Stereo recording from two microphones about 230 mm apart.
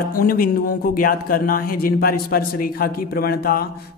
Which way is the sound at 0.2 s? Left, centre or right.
Left.